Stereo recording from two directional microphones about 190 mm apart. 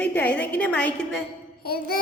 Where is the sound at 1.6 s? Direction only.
55° left (ahead or behind).